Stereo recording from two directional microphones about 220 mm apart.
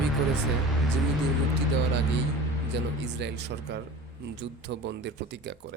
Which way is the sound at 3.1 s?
50° right (ahead or behind).